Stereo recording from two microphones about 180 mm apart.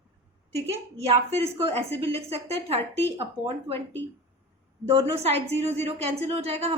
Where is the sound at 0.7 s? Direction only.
35° right (ahead or behind).